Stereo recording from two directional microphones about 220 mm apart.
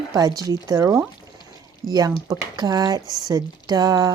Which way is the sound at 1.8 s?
40° right (ahead or behind).